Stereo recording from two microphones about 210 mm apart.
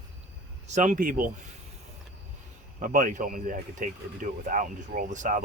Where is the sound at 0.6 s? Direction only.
35° right (ahead or behind).